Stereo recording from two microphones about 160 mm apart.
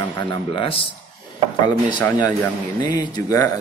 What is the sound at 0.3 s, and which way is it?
Speech, 35° left (ahead or behind).